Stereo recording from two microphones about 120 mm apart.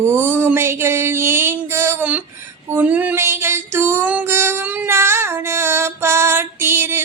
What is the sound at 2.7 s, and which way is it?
Music, 15° right (ahead or behind).